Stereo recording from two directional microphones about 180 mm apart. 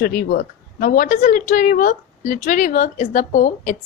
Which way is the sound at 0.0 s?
60° left (ahead or behind).